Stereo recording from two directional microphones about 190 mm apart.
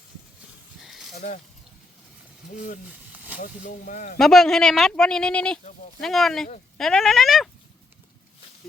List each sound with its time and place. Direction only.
0.8 s a sound: centre (ahead or behind)
3.4 s speech: 45° left (ahead or behind)
4.2 s speech: centre (ahead or behind)